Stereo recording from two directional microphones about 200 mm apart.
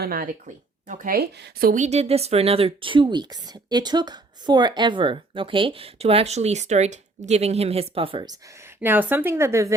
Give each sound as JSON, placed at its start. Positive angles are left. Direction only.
{"t": 0.0, "sound": "speech", "side_deg": -45}